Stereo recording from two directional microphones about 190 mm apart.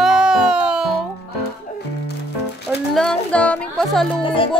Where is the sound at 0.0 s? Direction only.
5° right (ahead or behind).